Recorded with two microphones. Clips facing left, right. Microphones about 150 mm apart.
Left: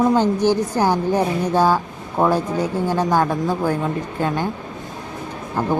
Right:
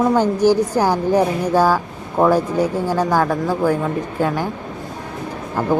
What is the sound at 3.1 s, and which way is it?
Speech, 15° left (ahead or behind).